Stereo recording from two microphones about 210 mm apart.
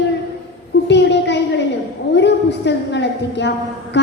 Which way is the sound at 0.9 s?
55° left (ahead or behind).